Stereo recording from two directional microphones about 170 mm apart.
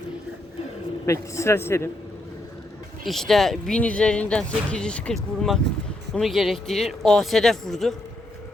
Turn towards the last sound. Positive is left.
turn(degrees=0)  # may be behind; listen again after turning